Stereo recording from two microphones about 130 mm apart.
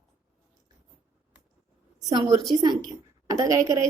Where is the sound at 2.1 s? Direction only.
30° right (ahead or behind).